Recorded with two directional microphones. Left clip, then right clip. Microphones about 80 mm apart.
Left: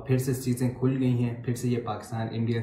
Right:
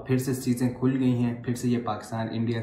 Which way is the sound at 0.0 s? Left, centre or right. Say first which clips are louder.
Right 1 dB; right.